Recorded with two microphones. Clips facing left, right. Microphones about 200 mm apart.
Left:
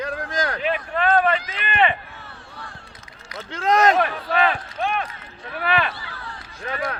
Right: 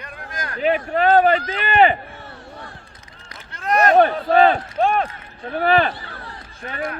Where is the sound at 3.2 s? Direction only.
90° left.